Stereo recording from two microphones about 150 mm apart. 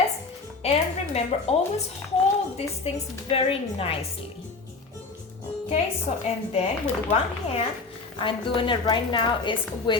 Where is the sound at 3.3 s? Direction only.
40° left (ahead or behind).